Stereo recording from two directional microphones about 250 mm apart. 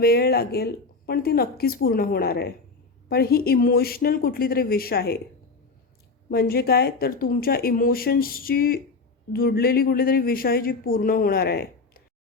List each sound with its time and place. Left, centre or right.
0.0 s speech: left
6.3 s speech: left